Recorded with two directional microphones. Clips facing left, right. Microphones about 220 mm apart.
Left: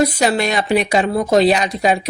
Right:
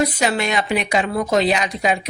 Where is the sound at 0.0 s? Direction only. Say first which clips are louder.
Left 4 dB; 35° left (ahead or behind).